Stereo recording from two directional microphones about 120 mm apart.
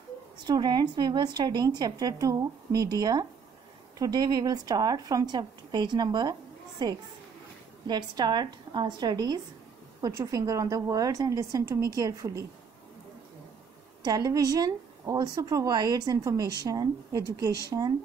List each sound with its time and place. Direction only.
0.4 s a woman's voice: 35° right (ahead or behind)
14.0 s a woman's voice: 35° right (ahead or behind)